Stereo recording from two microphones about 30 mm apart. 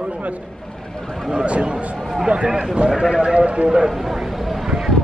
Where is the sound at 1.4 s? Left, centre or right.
Right.